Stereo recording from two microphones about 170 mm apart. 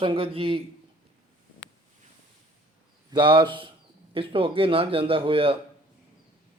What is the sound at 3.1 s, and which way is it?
A man's voice, 30° right (ahead or behind).